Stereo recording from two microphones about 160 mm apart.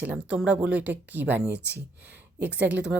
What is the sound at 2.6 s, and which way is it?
Speech, 10° right (ahead or behind).